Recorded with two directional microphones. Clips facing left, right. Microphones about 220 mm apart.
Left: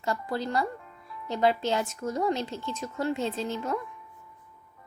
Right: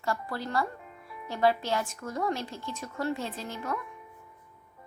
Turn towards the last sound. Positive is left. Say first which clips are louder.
# left 5 dB
turn(degrees=25)  # may be behind; listen again after turning